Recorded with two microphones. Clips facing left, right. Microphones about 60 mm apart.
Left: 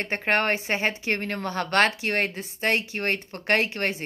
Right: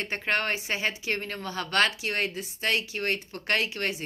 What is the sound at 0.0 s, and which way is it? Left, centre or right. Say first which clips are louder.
A woman's voice: left 4 dB; left.